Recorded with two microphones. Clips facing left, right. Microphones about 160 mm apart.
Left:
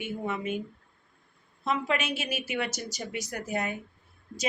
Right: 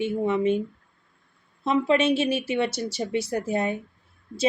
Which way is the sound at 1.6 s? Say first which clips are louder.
Right 8 dB; 30° right (ahead or behind).